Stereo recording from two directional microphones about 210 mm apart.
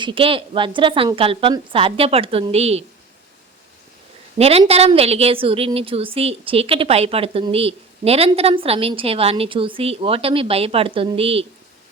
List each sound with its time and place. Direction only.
0.0 s a woman's voice: 25° right (ahead or behind)
4.4 s a woman's voice: 30° right (ahead or behind)